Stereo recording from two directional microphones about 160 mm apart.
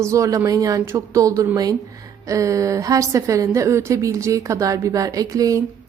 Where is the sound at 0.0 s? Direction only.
20° right (ahead or behind).